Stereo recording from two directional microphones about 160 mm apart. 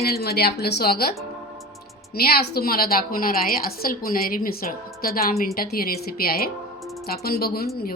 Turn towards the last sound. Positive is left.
turn(degrees=75)  # may be behind; listen again after turning